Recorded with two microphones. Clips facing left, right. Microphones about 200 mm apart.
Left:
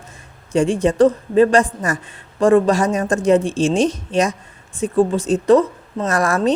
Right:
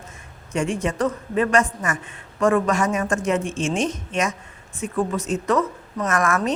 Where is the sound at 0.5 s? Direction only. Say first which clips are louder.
Left 7 dB; 30° left (ahead or behind).